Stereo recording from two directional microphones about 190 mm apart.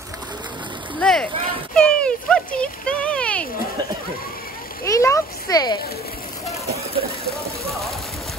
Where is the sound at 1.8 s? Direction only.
5° left (ahead or behind).